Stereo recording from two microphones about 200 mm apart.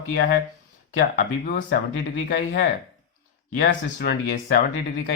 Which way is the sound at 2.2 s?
55° left (ahead or behind).